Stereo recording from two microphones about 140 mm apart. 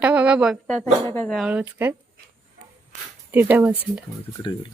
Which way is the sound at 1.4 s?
10° right (ahead or behind).